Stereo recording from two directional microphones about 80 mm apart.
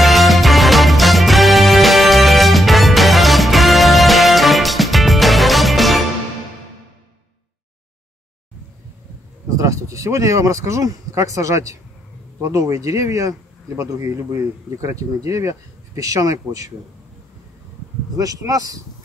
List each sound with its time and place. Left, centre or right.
0.0 s music: centre
9.5 s speech: right
18.1 s speech: right